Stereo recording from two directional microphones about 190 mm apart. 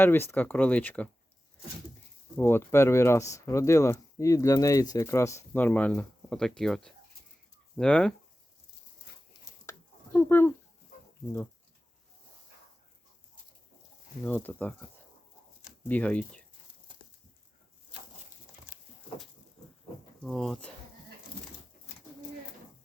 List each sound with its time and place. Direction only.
0.0 s speech: 10° left (ahead or behind)
2.3 s speech: 10° left (ahead or behind)
9.6 s a sound: 10° left (ahead or behind)
14.3 s speech: 10° left (ahead or behind)
15.9 s speech: 5° left (ahead or behind)
20.2 s speech: centre (ahead or behind)